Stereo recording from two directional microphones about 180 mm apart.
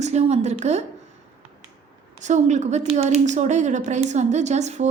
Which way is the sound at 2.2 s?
40° right (ahead or behind).